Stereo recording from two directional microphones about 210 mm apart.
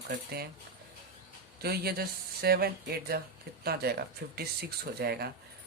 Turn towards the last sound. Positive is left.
turn(degrees=-50)  # may be behind; listen again after turning